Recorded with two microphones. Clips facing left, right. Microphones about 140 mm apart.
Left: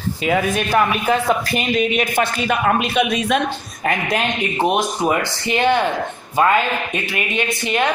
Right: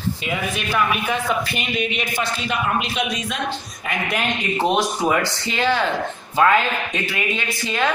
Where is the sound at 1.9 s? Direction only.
50° left (ahead or behind).